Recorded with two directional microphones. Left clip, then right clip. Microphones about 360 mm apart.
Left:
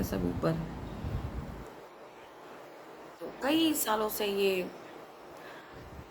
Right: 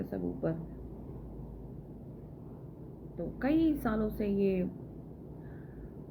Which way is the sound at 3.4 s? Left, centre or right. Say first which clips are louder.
Left 1 dB; centre.